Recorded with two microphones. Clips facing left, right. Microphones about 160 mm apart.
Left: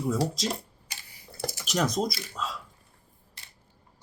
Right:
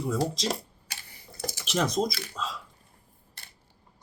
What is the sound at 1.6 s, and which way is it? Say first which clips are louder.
Speech: right 1 dB; centre (ahead or behind).